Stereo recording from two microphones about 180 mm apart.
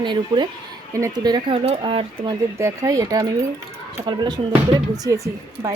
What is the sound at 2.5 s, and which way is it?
Speech, 15° right (ahead or behind).